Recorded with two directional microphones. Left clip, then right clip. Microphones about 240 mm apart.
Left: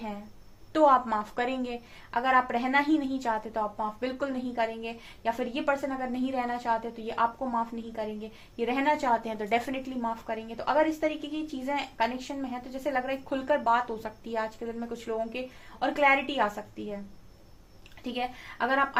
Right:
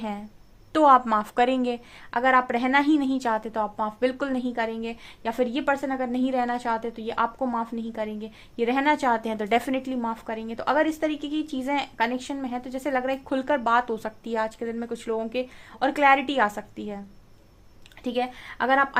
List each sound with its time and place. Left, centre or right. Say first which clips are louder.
0.7 s a woman's voice: right 5 dB; right
18.0 s a woman's voice: right 6 dB; right